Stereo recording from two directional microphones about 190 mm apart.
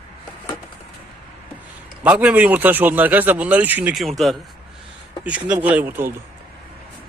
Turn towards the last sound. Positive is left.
turn(degrees=-10)  # may be behind; listen again after turning